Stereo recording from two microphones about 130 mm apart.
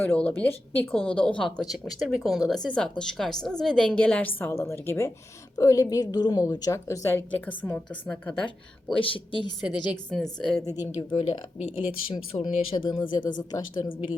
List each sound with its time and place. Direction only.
0.0 s a woman's voice: 10° left (ahead or behind)
9.0 s speech: 40° left (ahead or behind)
10.1 s a woman's voice: centre (ahead or behind)
10.9 s speech: 40° left (ahead or behind)